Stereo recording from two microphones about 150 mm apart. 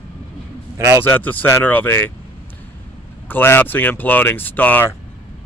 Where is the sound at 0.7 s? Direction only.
20° right (ahead or behind).